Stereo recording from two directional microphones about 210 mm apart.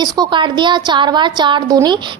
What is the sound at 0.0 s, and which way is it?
A woman's voice, 20° right (ahead or behind).